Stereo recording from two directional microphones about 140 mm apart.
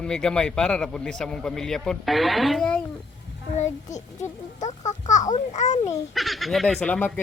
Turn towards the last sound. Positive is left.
turn(degrees=10)  # may be behind; listen again after turning